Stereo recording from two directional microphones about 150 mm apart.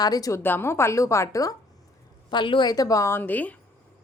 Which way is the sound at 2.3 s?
30° left (ahead or behind).